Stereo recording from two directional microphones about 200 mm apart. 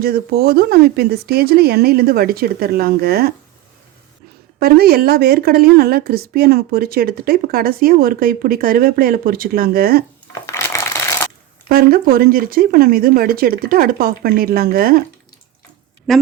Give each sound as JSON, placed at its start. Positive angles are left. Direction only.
{"t": 0.0, "sound": "a woman's voice", "side_deg": -50}
{"t": 4.6, "sound": "a woman's voice", "side_deg": -50}
{"t": 10.3, "sound": "a sound", "side_deg": 15}
{"t": 11.7, "sound": "a woman's voice", "side_deg": -50}
{"t": 16.1, "sound": "speech", "side_deg": 0}